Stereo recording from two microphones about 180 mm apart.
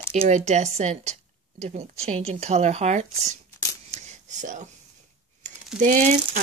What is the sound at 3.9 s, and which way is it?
Whispering, 40° right (ahead or behind).